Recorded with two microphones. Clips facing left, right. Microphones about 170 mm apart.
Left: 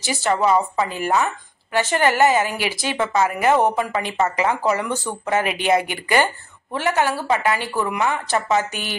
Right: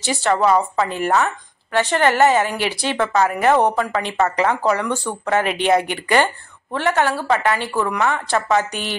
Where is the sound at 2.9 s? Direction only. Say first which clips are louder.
Right 2 dB; 15° left (ahead or behind).